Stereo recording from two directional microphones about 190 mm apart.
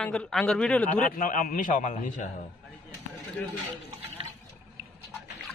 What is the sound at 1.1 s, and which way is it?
A man's voice, 45° left (ahead or behind).